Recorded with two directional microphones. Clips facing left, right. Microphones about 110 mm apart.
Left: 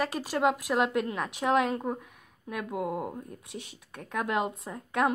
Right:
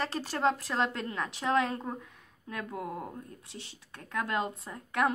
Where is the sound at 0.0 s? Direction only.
10° left (ahead or behind).